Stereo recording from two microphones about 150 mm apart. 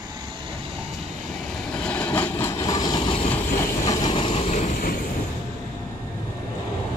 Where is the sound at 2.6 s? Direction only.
25° left (ahead or behind).